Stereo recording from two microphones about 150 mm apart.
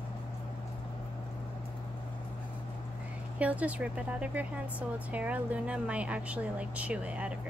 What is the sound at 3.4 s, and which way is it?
Speech, 10° right (ahead or behind).